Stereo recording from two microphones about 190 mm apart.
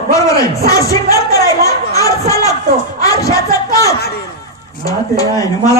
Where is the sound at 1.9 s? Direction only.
15° left (ahead or behind).